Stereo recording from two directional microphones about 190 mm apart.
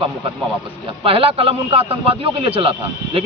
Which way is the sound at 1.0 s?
30° right (ahead or behind).